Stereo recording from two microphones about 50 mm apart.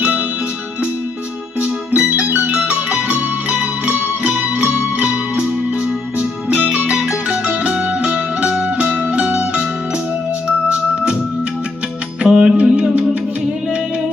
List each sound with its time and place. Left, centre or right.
1.6 s music: right
2.2 s music: right
2.5 s music: right
6.7 s music: centre
6.9 s music: centre
7.4 s music: right
12.2 s music: centre